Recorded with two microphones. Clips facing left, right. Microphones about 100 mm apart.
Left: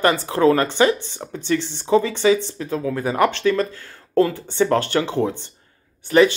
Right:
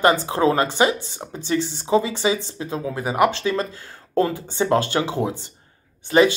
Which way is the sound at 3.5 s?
25° right (ahead or behind).